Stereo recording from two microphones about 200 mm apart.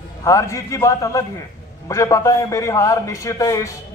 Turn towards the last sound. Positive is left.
turn(degrees=15)  # may be behind; listen again after turning